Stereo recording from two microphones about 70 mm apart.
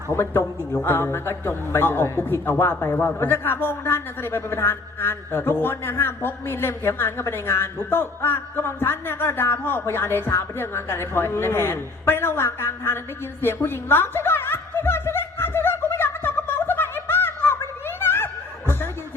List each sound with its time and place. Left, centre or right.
0.1 s a man's voice: left
13.4 s chuckle: left